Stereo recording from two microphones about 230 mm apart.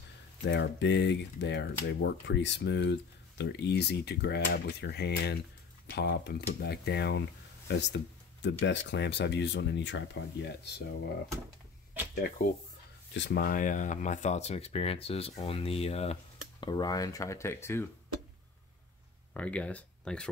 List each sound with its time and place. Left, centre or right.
0.5 s speech: left
13.1 s speech: left; by 17.8 s centre
19.3 s speech: centre